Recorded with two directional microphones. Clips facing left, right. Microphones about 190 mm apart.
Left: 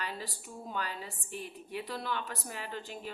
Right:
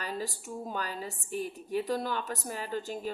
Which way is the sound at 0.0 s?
40° right (ahead or behind).